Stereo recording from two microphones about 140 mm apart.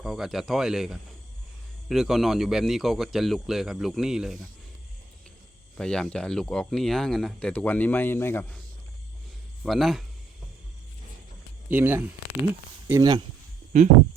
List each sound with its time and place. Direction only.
0.0 s speech: centre (ahead or behind)
5.7 s speech: 5° left (ahead or behind)
9.6 s speech: centre (ahead or behind)
11.7 s speech: 15° right (ahead or behind)
13.0 s speech: 30° right (ahead or behind)
13.7 s speech: 55° right (ahead or behind)